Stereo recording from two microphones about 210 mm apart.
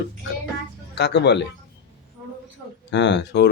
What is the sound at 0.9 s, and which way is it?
Speech, 55° left (ahead or behind).